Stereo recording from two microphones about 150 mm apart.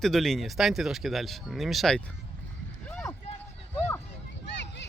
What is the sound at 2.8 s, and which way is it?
Run, 5° left (ahead or behind).